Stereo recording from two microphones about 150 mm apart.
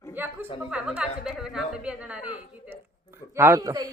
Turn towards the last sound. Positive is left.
turn(degrees=-25)  # may be behind; listen again after turning